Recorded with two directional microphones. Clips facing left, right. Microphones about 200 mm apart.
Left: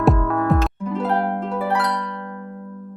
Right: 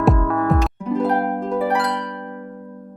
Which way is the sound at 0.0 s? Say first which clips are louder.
Right 1 dB; centre (ahead or behind).